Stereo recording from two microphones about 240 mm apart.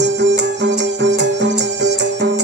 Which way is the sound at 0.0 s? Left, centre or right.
Right.